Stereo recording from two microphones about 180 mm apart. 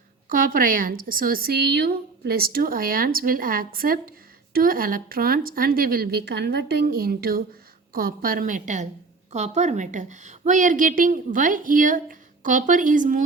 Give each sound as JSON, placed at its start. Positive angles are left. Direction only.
{"t": 0.3, "sound": "a woman's voice", "side_deg": -50}